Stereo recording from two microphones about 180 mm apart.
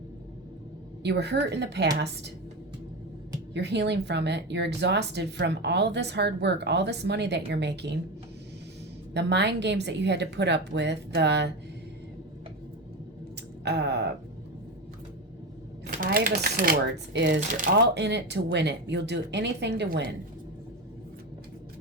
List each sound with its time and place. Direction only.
1.0 s speech: 70° right (ahead or behind)
3.5 s speech: 70° right (ahead or behind)
9.1 s speech: 70° right (ahead or behind)
13.7 s speech: 70° right (ahead or behind)
15.9 s speech: 50° right (ahead or behind); by 20.1 s 70° right (ahead or behind)